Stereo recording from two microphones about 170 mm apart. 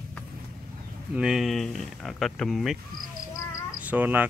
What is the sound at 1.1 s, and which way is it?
Speech, 5° right (ahead or behind).